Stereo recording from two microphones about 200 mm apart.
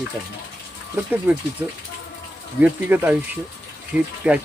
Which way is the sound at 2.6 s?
10° right (ahead or behind).